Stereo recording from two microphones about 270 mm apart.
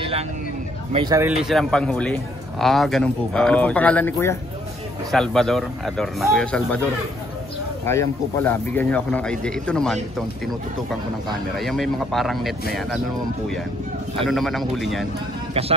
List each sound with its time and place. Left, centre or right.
0.9 s speech: centre
1.4 s speech: centre
7.8 s speech: centre
11.5 s speech: centre
14.2 s speech: centre